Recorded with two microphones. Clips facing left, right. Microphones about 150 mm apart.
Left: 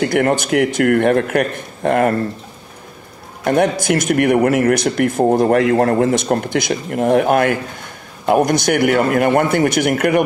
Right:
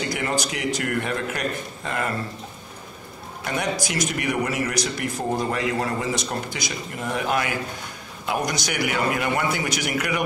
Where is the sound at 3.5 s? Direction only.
55° left (ahead or behind).